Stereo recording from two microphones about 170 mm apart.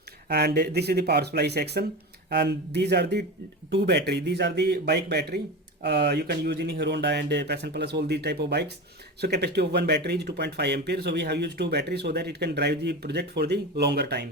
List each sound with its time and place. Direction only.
0.3 s speech: 70° right (ahead or behind)